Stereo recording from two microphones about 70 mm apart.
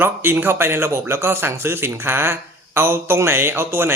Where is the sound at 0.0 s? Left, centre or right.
Right.